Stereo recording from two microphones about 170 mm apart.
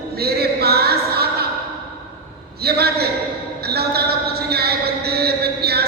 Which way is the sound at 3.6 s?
70° right (ahead or behind).